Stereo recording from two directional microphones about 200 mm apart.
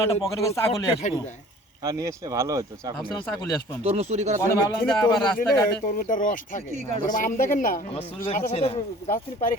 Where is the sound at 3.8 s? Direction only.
35° right (ahead or behind).